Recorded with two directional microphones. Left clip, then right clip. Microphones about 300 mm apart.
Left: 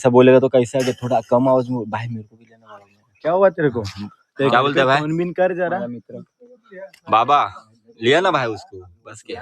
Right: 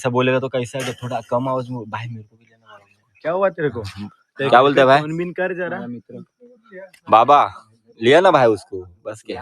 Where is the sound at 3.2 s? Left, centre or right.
Left.